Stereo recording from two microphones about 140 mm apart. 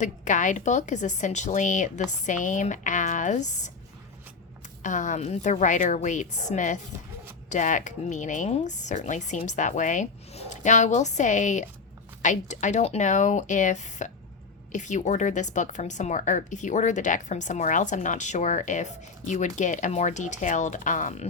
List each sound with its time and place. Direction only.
0.0 s speech: 60° left (ahead or behind)
4.8 s speech: 60° left (ahead or behind)